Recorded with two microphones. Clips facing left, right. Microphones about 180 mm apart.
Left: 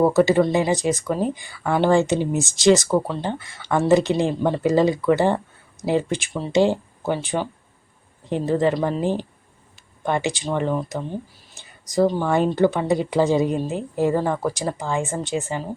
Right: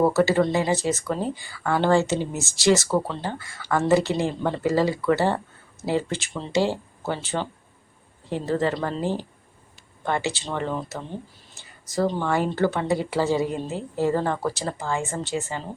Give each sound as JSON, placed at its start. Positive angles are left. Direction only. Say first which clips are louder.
{"t": 0.0, "sound": "speech", "louder": "left 3 dB", "side_deg": 15}